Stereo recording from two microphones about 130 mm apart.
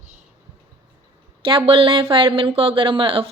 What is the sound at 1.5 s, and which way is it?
Speech, 40° right (ahead or behind).